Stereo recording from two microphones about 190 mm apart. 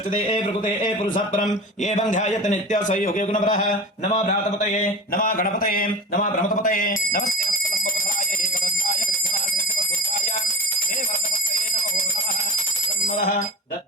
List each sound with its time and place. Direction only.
1.8 s a man's voice: 40° left (ahead or behind)
8.6 s clock: 50° left (ahead or behind)